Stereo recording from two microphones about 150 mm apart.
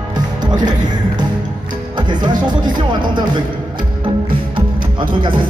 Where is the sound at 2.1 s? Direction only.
30° right (ahead or behind).